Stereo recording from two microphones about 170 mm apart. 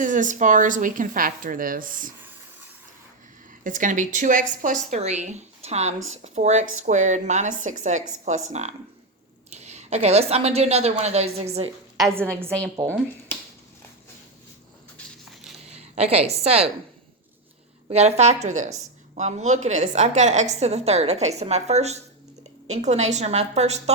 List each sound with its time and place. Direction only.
0.0 s a woman's voice: 50° right (ahead or behind)
3.6 s a woman's voice: 50° right (ahead or behind)
12.5 s speech: 5° left (ahead or behind)
15.7 s a woman's voice: 40° right (ahead or behind)
17.8 s a woman's voice: 35° right (ahead or behind)